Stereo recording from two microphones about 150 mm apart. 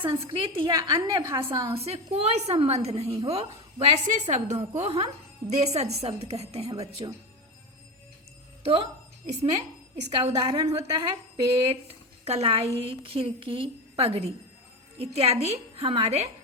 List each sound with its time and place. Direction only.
0.0 s a woman's voice: 35° right (ahead or behind); by 1.5 s 20° right (ahead or behind)
1.7 s a woman's voice: 40° right (ahead or behind)
8.6 s a woman's voice: 40° right (ahead or behind)
10.1 s a woman's voice: 35° right (ahead or behind)